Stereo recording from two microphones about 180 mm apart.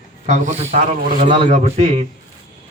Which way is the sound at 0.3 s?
40° right (ahead or behind).